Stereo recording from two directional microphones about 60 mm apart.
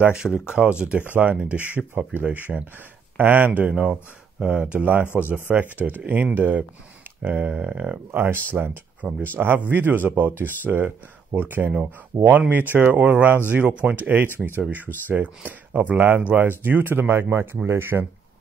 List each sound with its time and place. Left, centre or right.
0.1 s speech: centre
8.1 s speech: right